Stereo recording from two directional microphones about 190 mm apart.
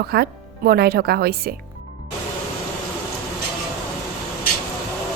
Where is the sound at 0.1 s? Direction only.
55° right (ahead or behind).